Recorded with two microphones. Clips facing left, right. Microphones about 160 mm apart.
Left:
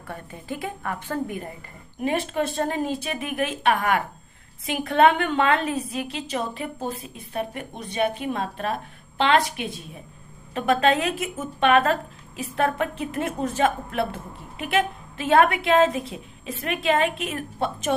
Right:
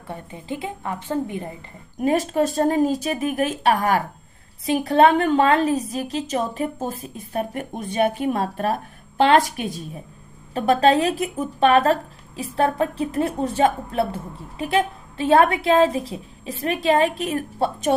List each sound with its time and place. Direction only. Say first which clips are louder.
0.1 s a woman's voice: right 3 dB; 20° right (ahead or behind)
2.0 s a woman's voice: right 5 dB; 40° right (ahead or behind)